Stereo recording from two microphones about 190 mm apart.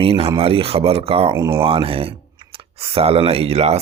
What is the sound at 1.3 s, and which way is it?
Speech, 20° right (ahead or behind).